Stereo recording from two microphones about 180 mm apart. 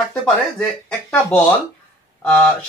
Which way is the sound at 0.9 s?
10° left (ahead or behind).